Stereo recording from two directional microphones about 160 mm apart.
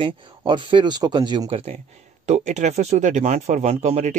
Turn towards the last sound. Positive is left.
turn(degrees=-45)  # may be behind; listen again after turning